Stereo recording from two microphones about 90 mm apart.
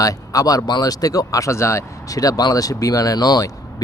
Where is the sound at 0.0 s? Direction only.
40° left (ahead or behind).